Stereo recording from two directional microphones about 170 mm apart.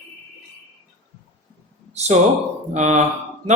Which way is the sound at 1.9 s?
40° right (ahead or behind).